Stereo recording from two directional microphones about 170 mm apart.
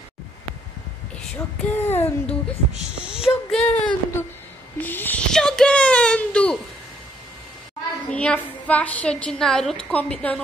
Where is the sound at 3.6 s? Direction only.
35° left (ahead or behind).